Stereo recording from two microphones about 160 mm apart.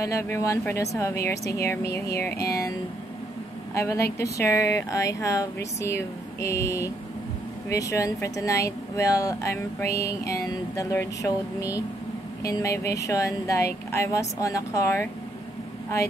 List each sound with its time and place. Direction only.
0.0 s speech: 20° left (ahead or behind)
1.9 s a sound: 85° left
3.7 s speech: 15° left (ahead or behind)